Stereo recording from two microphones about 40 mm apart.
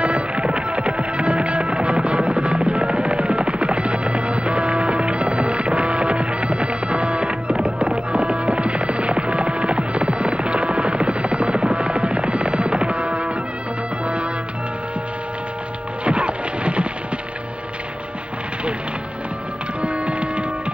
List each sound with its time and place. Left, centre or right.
0.0 s music: right
16.0 s music: right
19.8 s printer: right